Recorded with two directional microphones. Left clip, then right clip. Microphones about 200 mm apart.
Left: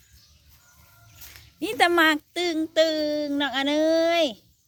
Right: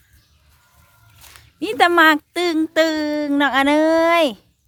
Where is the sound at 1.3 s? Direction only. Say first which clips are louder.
Right 5 dB; 25° right (ahead or behind).